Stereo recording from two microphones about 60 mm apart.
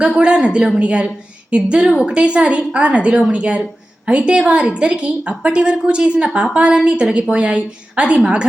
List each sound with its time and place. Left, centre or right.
0.2 s a woman's voice: centre